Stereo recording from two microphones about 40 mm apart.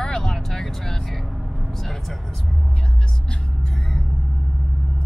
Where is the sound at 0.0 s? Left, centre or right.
Centre.